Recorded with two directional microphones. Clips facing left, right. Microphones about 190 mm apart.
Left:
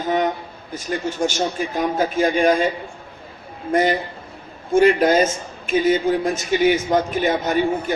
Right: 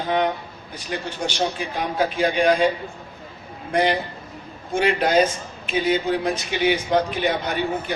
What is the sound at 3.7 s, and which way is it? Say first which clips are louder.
A man's voice: left 2 dB; 45° left (ahead or behind).